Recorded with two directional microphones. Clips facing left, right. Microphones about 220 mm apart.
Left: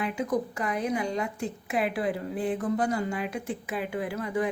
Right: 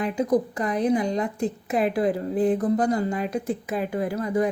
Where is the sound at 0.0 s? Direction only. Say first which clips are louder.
Right 6 dB; 35° right (ahead or behind).